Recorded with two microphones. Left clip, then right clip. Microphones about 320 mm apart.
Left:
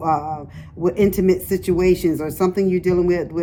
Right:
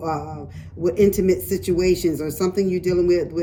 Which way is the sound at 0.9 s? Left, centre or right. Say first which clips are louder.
Even; centre.